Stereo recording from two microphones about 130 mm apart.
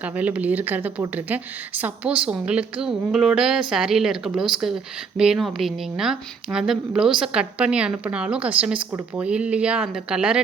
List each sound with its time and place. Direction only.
0.0 s speech: 10° right (ahead or behind)